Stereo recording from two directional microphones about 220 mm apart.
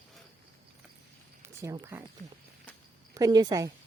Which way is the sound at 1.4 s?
15° right (ahead or behind).